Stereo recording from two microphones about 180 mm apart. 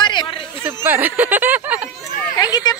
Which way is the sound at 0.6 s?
10° right (ahead or behind).